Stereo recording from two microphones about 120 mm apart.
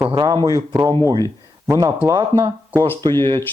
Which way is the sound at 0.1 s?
35° right (ahead or behind).